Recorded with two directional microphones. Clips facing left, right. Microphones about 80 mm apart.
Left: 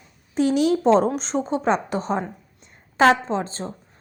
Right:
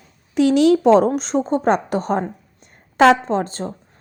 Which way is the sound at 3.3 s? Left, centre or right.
Right.